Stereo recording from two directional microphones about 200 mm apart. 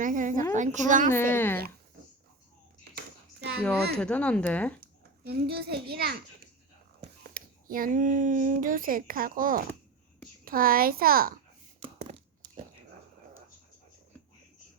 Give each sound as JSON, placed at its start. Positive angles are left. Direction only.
{"t": 0.0, "sound": "a woman's voice", "side_deg": -40}
{"t": 1.1, "sound": "speech", "side_deg": 10}
{"t": 2.9, "sound": "hands", "side_deg": -50}
{"t": 3.9, "sound": "speech", "side_deg": 5}
{"t": 4.8, "sound": "a child's voice", "side_deg": -50}
{"t": 7.3, "sound": "speech", "side_deg": -45}